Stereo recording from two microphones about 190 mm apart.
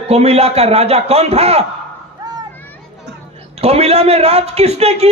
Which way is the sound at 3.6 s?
35° right (ahead or behind).